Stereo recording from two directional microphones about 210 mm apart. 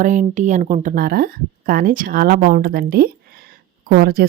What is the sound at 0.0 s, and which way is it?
A woman's voice, 35° right (ahead or behind).